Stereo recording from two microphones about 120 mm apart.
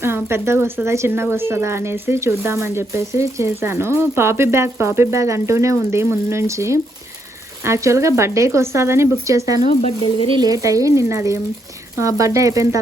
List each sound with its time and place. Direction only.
0.0 s a woman's voice: 20° right (ahead or behind)
9.6 s speech: 65° left (ahead or behind)
10.2 s speech: 40° right (ahead or behind)
10.5 s a woman's voice: 30° right (ahead or behind)